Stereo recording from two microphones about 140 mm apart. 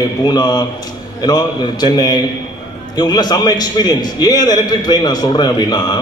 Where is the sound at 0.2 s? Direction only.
30° left (ahead or behind).